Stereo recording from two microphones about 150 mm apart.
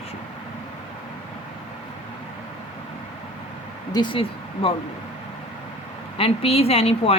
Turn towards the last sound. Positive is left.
turn(degrees=40)  # may be behind; listen again after turning